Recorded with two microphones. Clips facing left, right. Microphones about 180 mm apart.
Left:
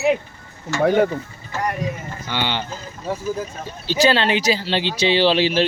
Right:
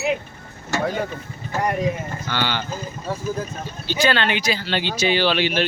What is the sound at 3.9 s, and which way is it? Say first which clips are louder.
Speech: left 3 dB; 30° left (ahead or behind).